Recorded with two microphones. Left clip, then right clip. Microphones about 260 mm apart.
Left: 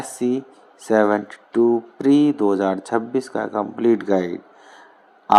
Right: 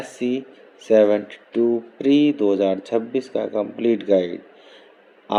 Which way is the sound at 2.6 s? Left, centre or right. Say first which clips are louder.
Right 1 dB; left.